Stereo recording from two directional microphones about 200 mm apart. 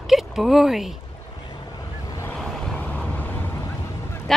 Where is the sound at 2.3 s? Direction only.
Centre (ahead or behind).